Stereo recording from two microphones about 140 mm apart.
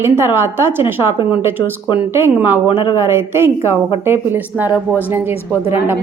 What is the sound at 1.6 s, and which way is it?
Speech, 35° left (ahead or behind).